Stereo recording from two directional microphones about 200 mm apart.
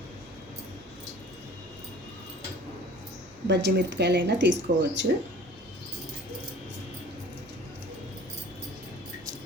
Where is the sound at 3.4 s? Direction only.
60° right (ahead or behind).